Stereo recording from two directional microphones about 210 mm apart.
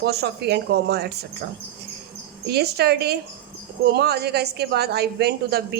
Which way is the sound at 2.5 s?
50° right (ahead or behind).